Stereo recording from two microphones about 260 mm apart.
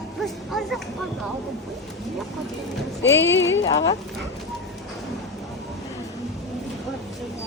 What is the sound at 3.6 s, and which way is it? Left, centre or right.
Speech, centre.